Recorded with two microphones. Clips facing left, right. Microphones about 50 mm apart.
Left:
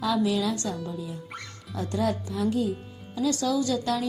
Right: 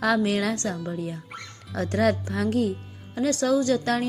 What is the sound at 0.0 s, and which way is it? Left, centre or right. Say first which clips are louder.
Speech: right 2 dB; right.